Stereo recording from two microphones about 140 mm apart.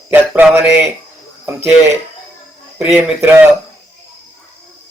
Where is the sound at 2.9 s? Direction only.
15° right (ahead or behind).